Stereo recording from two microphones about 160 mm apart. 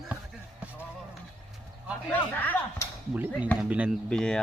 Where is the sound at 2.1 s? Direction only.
10° left (ahead or behind).